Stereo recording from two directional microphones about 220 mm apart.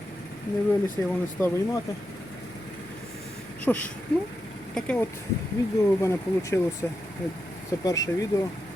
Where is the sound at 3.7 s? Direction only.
5° left (ahead or behind).